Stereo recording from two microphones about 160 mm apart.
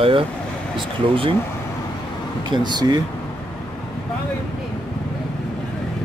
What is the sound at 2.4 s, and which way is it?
Speech, 25° right (ahead or behind).